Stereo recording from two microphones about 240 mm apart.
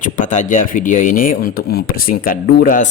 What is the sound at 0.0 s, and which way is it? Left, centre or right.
Speech, left.